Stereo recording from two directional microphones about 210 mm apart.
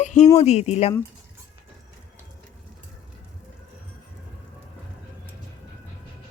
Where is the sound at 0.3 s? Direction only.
30° left (ahead or behind).